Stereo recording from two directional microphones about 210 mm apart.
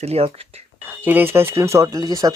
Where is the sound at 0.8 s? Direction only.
10° right (ahead or behind).